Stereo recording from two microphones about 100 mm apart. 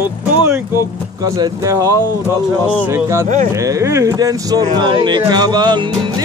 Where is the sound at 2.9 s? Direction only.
30° right (ahead or behind).